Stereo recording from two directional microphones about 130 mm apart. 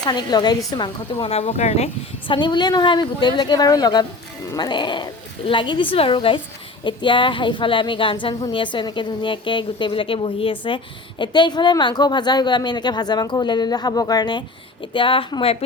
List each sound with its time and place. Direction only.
0.0 s a woman's voice: 35° left (ahead or behind)
1.2 s speech: 50° left (ahead or behind)
2.2 s a woman's voice: 35° left (ahead or behind)